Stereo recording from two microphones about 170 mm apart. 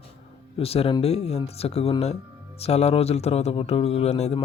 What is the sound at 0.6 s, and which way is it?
Speech, 35° left (ahead or behind).